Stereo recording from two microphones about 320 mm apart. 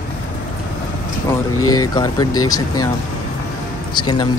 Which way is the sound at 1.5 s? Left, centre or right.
Left.